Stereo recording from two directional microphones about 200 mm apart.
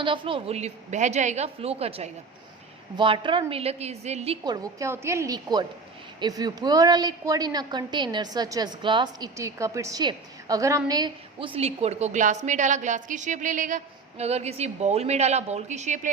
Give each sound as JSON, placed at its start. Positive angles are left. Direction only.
{"t": 0.0, "sound": "a woman's voice", "side_deg": -25}
{"t": 4.4, "sound": "a woman's voice", "side_deg": -20}